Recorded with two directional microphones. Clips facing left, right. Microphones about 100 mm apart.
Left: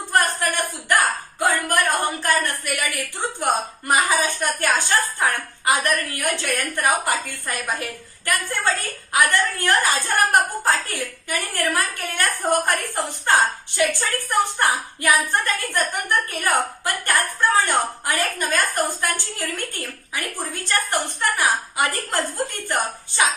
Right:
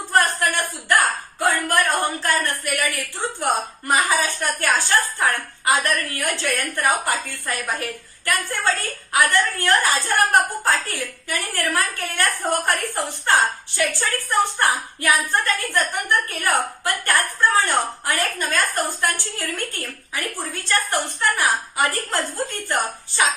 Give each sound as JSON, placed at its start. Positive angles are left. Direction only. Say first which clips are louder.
{"t": 0.2, "sound": "a woman's voice", "louder": "right 1 dB", "side_deg": 15}